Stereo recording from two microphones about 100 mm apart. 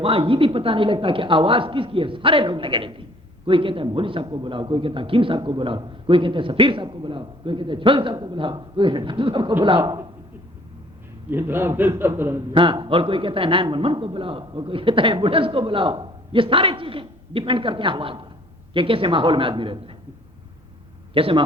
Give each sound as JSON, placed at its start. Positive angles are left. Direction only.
{"t": 0.0, "sound": "a man's voice", "side_deg": -65}
{"t": 9.8, "sound": "a man's voice", "side_deg": -40}
{"t": 11.3, "sound": "a man's voice", "side_deg": -20}
{"t": 12.5, "sound": "a man's voice", "side_deg": -55}
{"t": 21.1, "sound": "a man's voice", "side_deg": -65}